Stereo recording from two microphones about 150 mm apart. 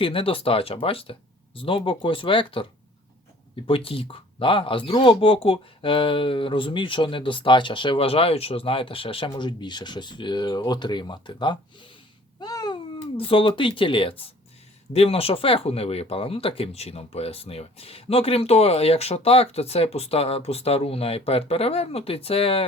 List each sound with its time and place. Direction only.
0.0 s speech: 35° left (ahead or behind)
3.7 s speech: 40° left (ahead or behind)